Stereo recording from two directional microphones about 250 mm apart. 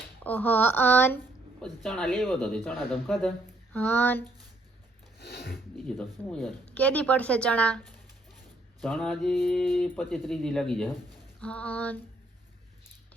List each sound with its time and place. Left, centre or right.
0.2 s speech: centre
5.2 s speech: left
5.7 s speech: centre